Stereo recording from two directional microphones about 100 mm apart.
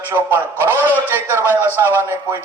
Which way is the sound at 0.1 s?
20° right (ahead or behind).